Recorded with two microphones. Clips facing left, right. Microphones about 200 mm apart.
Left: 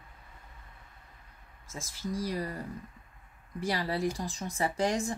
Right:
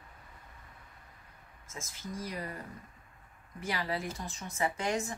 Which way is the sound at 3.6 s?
35° left (ahead or behind).